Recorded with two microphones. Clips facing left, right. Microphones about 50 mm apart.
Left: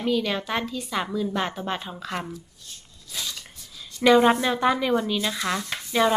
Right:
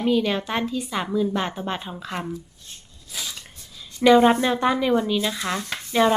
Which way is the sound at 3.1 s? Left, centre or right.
Centre.